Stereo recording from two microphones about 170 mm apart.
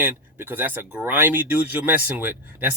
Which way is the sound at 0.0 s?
10° right (ahead or behind).